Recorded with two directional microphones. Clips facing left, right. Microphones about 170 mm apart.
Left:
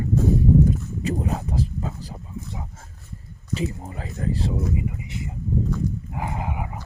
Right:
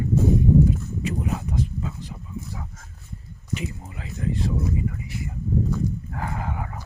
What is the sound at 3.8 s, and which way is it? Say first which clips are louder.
Speech: left 2 dB; 40° left (ahead or behind).